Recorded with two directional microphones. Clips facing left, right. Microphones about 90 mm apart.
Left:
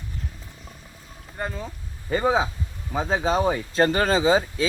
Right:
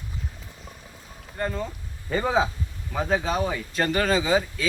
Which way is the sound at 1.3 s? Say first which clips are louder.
Right 2 dB; 10° left (ahead or behind).